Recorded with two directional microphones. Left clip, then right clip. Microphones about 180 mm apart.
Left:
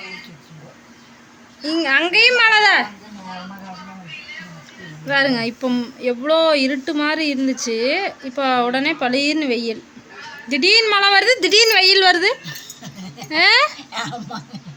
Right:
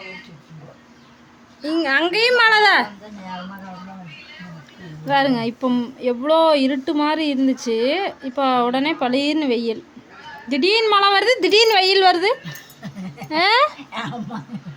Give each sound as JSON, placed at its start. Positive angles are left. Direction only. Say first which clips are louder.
{"t": 1.6, "sound": "speech", "louder": "left 1 dB", "side_deg": -10}
{"t": 5.0, "sound": "speech", "louder": "even", "side_deg": -10}
{"t": 12.8, "sound": "a sound", "louder": "even", "side_deg": -25}
{"t": 13.2, "sound": "speech", "louder": "left 2 dB", "side_deg": -10}